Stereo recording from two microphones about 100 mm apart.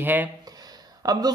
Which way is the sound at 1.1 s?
40° right (ahead or behind).